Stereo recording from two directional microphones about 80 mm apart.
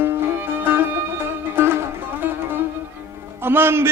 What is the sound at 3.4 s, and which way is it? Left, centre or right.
Speech, right.